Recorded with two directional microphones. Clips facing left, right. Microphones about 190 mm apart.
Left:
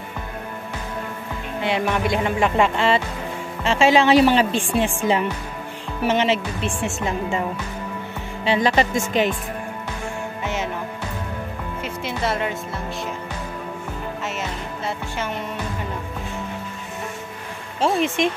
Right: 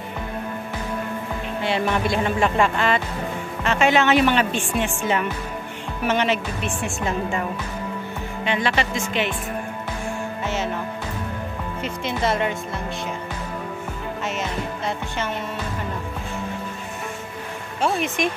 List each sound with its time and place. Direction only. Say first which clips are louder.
1.6 s music: left 1 dB; 15° left (ahead or behind)
3.6 s music: left 2 dB; 30° left (ahead or behind)
6.0 s speech: left 2 dB; 25° left (ahead or behind)
8.6 s music: left 4 dB; 40° left (ahead or behind)
10.4 s music: even; 15° left (ahead or behind)
11.8 s speech: right 2 dB; 5° left (ahead or behind)
17.7 s speech: left 3 dB; 30° left (ahead or behind)